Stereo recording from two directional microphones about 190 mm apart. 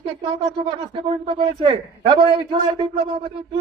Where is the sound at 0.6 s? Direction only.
30° right (ahead or behind).